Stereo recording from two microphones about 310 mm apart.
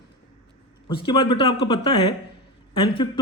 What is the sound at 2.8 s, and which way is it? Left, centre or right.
Speech, centre.